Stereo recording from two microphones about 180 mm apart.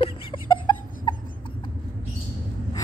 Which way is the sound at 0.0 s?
30° left (ahead or behind).